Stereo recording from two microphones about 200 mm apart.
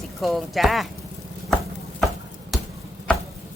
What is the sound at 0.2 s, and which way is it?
Speech, centre (ahead or behind).